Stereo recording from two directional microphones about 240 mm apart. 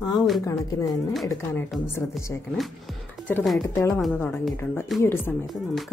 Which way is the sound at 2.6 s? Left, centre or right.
Centre.